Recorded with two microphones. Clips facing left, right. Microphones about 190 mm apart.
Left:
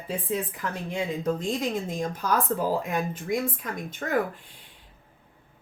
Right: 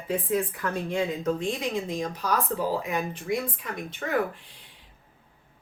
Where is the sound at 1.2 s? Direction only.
40° left (ahead or behind).